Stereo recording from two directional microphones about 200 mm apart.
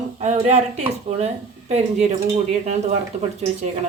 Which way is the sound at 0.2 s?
35° right (ahead or behind).